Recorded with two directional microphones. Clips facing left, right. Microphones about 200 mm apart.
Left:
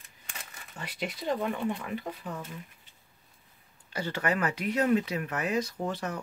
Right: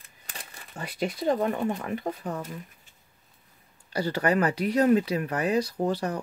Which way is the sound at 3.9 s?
35° right (ahead or behind).